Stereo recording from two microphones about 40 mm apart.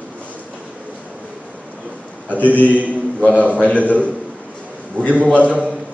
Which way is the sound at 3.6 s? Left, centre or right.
Left.